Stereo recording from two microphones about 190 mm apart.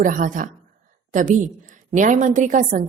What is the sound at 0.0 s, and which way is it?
A woman's voice, 45° right (ahead or behind).